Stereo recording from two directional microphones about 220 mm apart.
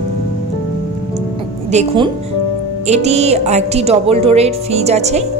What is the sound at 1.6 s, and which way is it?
A woman's voice, 25° right (ahead or behind).